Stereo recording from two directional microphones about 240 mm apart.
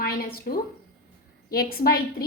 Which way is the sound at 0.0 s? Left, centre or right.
Left.